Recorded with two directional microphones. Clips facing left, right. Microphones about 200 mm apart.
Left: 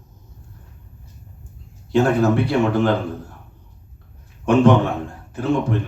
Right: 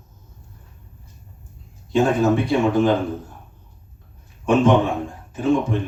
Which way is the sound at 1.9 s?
65° left (ahead or behind).